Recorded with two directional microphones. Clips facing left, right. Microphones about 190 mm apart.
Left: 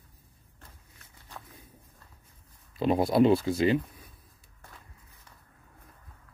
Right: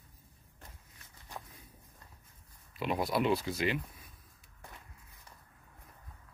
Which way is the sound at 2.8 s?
30° left (ahead or behind).